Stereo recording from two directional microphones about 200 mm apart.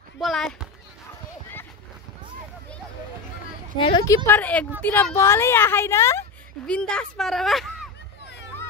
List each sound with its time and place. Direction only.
0.2 s speech: centre (ahead or behind)
3.7 s a woman's voice: 25° left (ahead or behind)
4.3 s a woman's voice: 10° left (ahead or behind)